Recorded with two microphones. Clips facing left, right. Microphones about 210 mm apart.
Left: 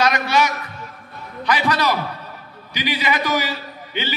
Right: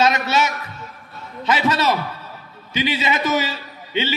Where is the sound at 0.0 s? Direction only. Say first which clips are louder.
Even; 25° right (ahead or behind).